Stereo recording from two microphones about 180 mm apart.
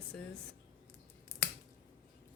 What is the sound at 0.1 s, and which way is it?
Speech, 5° left (ahead or behind).